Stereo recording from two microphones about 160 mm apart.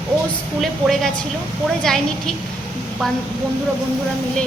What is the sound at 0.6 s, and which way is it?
A woman's voice, centre (ahead or behind).